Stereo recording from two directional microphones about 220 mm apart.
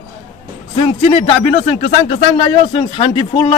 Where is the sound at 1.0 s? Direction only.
25° left (ahead or behind).